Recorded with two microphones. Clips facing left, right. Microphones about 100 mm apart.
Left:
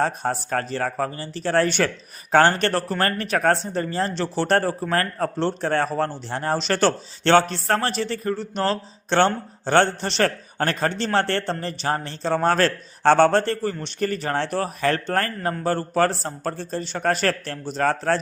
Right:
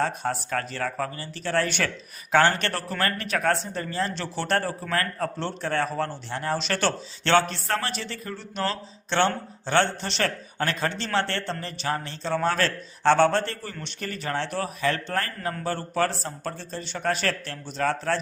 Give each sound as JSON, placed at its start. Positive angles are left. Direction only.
{"t": 0.0, "sound": "speech", "side_deg": 35}